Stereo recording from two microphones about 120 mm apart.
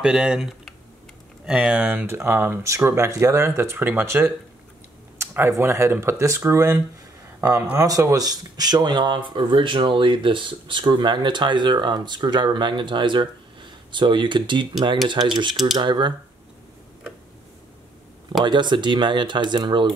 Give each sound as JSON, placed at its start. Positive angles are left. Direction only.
{"t": 0.0, "sound": "speech", "side_deg": -5}
{"t": 5.2, "sound": "a sound", "side_deg": -20}
{"t": 5.6, "sound": "speech", "side_deg": -20}
{"t": 18.4, "sound": "speech", "side_deg": -40}